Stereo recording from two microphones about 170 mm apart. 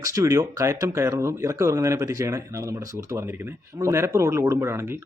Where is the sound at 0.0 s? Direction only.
20° right (ahead or behind).